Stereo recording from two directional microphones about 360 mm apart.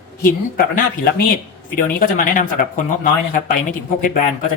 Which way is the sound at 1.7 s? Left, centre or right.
Left.